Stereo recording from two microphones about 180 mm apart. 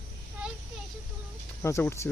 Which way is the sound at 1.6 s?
15° left (ahead or behind).